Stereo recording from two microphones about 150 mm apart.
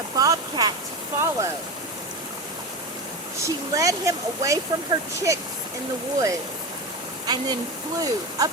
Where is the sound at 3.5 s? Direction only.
20° right (ahead or behind).